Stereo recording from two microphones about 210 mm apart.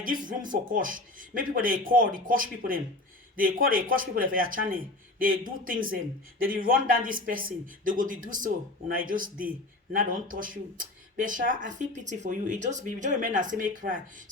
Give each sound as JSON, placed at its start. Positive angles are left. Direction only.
{"t": 0.0, "sound": "a man's voice", "side_deg": -40}